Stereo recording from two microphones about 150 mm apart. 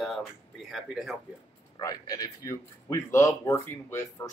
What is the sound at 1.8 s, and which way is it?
A man's voice, 25° left (ahead or behind).